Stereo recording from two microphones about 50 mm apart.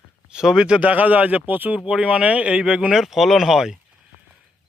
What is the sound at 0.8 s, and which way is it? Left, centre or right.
Speech, right.